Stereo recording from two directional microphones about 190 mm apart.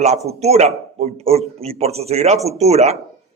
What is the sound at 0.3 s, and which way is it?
A man's voice, 35° right (ahead or behind).